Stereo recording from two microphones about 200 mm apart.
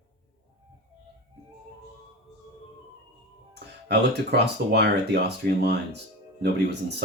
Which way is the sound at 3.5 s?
55° right (ahead or behind).